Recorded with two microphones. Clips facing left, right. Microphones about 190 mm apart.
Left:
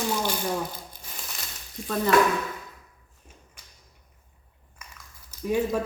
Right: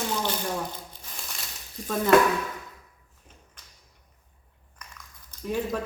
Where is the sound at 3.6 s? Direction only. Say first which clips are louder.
Left 1 dB; 10° left (ahead or behind).